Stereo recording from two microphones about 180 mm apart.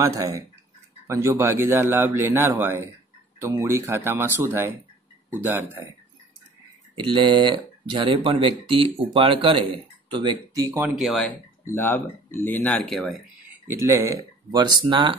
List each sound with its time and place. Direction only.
0.0 s speech: 20° right (ahead or behind)
7.0 s speech: 25° right (ahead or behind)
11.0 s speech: centre (ahead or behind)
11.6 s speech: 10° left (ahead or behind)
13.7 s speech: 15° right (ahead or behind)